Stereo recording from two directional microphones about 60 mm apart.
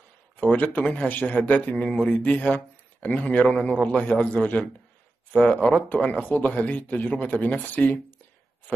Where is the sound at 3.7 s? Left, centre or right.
Centre.